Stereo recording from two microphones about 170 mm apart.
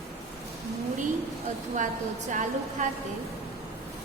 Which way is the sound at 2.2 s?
45° right (ahead or behind).